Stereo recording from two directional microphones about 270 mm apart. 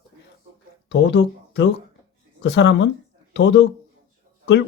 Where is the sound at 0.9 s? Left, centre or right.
Left.